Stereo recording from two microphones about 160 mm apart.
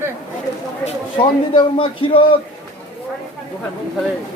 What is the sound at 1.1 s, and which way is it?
A man's voice, 30° left (ahead or behind).